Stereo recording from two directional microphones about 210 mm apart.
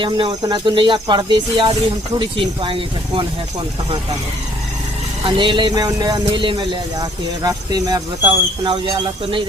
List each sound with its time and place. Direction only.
0.0 s a man's voice: 20° right (ahead or behind)
5.2 s a man's voice: 25° right (ahead or behind)